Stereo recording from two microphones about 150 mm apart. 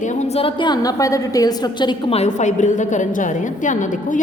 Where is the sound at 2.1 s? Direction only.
50° left (ahead or behind).